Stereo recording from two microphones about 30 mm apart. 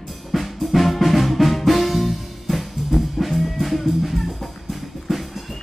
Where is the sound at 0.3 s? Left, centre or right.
Centre.